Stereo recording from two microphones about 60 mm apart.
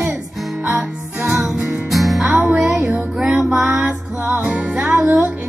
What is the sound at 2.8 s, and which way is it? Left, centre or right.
Music, centre.